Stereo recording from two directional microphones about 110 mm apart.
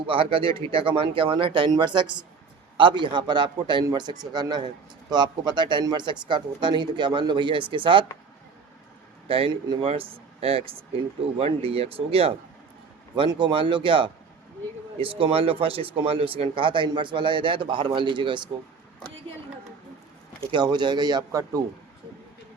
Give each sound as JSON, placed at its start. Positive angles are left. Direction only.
{"t": 0.0, "sound": "a man's voice", "side_deg": -55}
{"t": 9.2, "sound": "a man's voice", "side_deg": -55}
{"t": 20.5, "sound": "speech", "side_deg": -40}